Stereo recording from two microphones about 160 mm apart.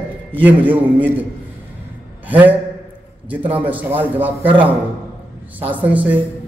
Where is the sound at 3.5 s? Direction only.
10° right (ahead or behind).